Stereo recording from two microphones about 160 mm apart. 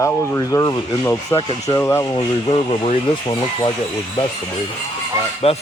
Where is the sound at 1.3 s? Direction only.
30° left (ahead or behind).